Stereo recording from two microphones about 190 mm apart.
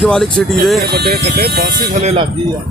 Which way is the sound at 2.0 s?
35° right (ahead or behind).